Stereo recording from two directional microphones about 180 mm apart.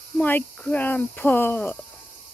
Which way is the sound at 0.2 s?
10° left (ahead or behind).